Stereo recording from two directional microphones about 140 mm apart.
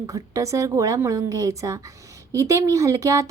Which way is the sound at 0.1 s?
25° right (ahead or behind).